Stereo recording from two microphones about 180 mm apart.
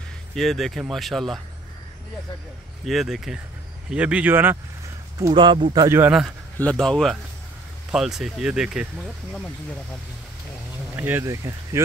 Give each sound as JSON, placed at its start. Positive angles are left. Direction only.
{"t": 0.3, "sound": "speech", "side_deg": 0}
{"t": 2.8, "sound": "speech", "side_deg": 0}
{"t": 5.2, "sound": "speech", "side_deg": -25}
{"t": 5.9, "sound": "speech", "side_deg": -10}
{"t": 6.6, "sound": "speech", "side_deg": 5}
{"t": 11.0, "sound": "speech", "side_deg": -10}